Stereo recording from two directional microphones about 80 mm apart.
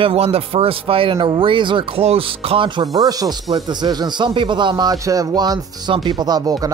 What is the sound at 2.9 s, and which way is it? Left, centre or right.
Speech, right.